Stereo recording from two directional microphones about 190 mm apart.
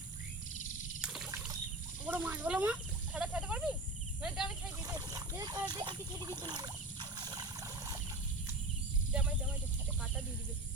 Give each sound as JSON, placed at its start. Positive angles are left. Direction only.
{"t": 1.0, "sound": "trickle", "side_deg": -5}
{"t": 2.0, "sound": "snake", "side_deg": -10}
{"t": 4.2, "sound": "cricket", "side_deg": -5}
{"t": 4.8, "sound": "a sound", "side_deg": -20}